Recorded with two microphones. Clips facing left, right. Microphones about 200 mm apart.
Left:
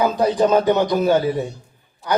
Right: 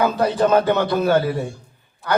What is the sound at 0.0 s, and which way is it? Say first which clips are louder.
A man's voice: left 1 dB; 15° left (ahead or behind).